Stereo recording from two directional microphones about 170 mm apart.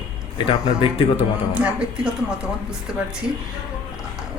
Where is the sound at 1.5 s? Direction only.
5° right (ahead or behind).